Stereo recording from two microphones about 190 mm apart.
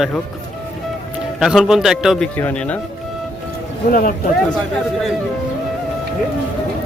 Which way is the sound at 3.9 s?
50° left (ahead or behind).